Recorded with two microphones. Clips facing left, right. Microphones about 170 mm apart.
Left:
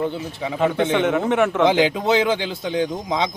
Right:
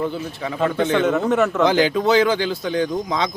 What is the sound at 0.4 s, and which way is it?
A man's voice, 10° left (ahead or behind).